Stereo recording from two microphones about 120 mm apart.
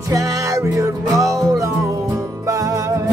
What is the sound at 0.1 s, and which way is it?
Music, 30° right (ahead or behind).